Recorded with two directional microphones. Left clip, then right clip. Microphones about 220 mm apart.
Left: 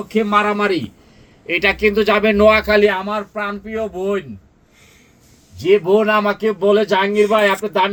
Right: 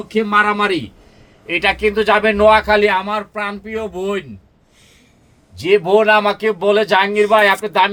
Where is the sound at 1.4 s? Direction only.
20° right (ahead or behind).